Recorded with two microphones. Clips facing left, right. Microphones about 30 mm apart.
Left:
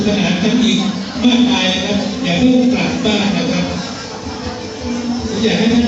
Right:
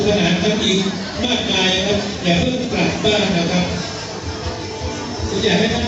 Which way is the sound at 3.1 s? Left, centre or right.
Left.